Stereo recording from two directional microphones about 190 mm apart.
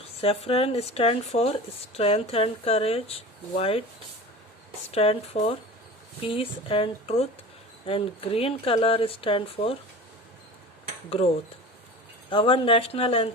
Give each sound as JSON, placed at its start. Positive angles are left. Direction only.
{"t": 0.2, "sound": "speech", "side_deg": 30}
{"t": 4.9, "sound": "speech", "side_deg": 30}
{"t": 12.3, "sound": "speech", "side_deg": 30}